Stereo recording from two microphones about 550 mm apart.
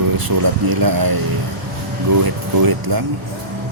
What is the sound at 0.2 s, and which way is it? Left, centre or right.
A man's voice, right.